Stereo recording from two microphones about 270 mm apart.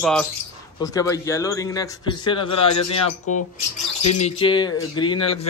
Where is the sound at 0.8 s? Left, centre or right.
Centre.